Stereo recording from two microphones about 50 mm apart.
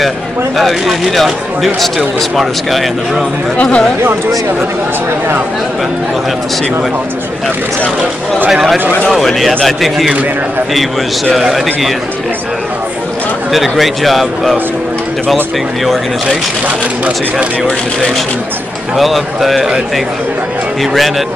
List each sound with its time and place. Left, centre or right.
0.6 s speech: centre
3.6 s speech: centre
8.5 s speech: centre
11.3 s speech: centre
13.5 s speech: centre
15.8 s speech: centre
16.6 s speech: right
18.9 s speech: centre